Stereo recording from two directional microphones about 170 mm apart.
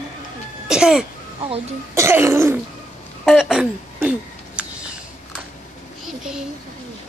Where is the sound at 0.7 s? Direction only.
5° right (ahead or behind).